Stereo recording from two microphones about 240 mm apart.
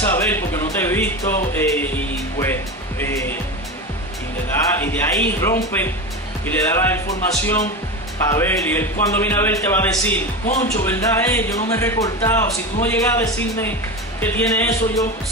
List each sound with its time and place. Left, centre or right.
0.0 s speech: centre
4.7 s speech: centre
10.4 s speech: left
10.7 s speech: centre